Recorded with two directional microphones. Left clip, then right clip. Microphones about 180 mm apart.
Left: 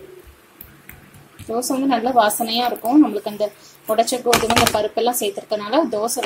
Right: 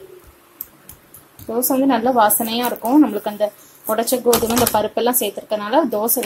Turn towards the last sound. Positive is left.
turn(degrees=-10)  # may be behind; listen again after turning